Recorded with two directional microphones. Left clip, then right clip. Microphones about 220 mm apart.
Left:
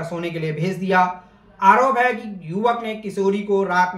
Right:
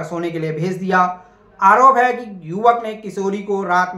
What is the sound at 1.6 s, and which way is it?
Speech, 20° right (ahead or behind).